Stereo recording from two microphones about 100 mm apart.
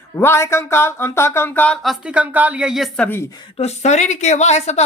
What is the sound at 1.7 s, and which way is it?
Speech, centre (ahead or behind).